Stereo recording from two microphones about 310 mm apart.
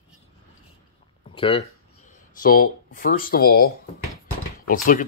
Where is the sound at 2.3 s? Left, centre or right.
Left.